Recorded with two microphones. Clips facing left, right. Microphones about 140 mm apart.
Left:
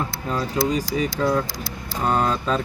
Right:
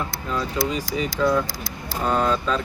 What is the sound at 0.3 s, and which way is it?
Speech, 45° left (ahead or behind).